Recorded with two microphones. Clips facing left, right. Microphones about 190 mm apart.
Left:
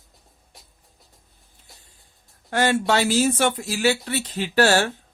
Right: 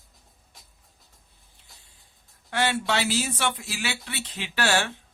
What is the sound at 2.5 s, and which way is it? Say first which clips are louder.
Speech: left 5 dB; 45° left (ahead or behind).